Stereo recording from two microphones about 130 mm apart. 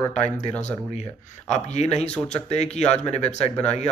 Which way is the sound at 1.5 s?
60° left (ahead or behind).